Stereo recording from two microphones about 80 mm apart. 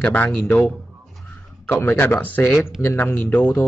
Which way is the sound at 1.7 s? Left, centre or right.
Left.